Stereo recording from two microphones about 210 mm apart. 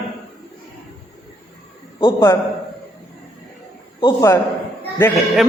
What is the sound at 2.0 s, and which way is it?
Speech, 20° left (ahead or behind).